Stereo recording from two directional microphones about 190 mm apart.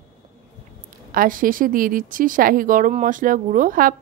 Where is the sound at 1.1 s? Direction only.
45° right (ahead or behind).